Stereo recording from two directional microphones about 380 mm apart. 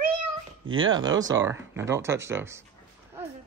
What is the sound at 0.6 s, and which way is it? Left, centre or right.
Speech, right.